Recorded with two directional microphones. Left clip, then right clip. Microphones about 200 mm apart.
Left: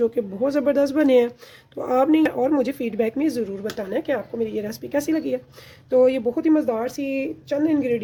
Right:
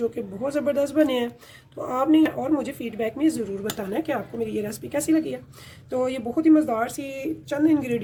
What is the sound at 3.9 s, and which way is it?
A woman's voice, 25° left (ahead or behind).